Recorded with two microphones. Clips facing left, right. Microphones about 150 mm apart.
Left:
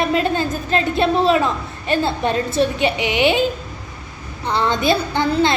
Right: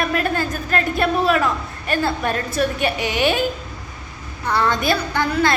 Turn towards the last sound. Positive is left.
turn(degrees=25)  # may be behind; listen again after turning